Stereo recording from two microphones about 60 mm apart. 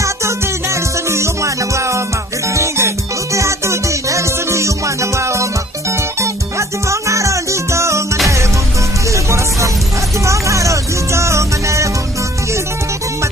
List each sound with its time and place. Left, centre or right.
0.0 s music: right